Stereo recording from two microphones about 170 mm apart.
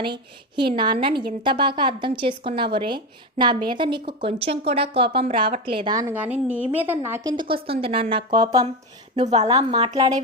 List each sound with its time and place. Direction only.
0.0 s a woman's voice: 30° right (ahead or behind)
7.3 s a woman's voice: 30° right (ahead or behind)
9.1 s a woman's voice: 40° right (ahead or behind)
9.5 s speech: 25° right (ahead or behind)